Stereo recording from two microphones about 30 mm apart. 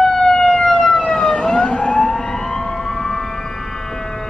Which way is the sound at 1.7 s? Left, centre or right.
Left.